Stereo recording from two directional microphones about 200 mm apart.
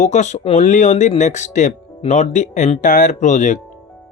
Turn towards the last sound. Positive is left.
turn(degrees=35)  # may be behind; listen again after turning